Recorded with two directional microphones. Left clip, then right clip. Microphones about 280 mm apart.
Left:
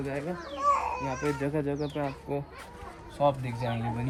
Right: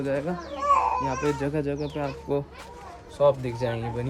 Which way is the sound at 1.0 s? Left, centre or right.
Centre.